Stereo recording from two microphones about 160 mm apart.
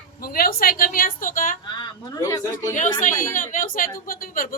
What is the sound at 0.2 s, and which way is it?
Speech, 65° left (ahead or behind).